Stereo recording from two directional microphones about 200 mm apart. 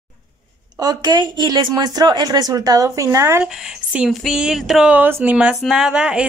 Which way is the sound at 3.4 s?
5° right (ahead or behind).